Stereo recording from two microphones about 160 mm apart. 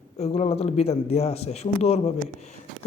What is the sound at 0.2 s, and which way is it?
A man's voice, 40° left (ahead or behind).